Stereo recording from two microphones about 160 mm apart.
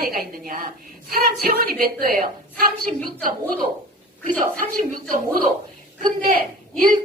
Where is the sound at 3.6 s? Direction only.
35° right (ahead or behind).